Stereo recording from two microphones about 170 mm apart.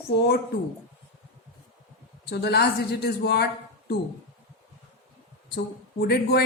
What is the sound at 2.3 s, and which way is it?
Speech, 70° left (ahead or behind).